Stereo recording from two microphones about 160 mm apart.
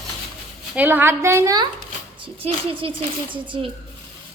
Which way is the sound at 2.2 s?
35° right (ahead or behind).